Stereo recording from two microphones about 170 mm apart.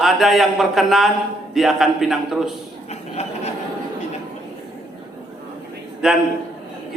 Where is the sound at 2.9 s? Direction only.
40° left (ahead or behind).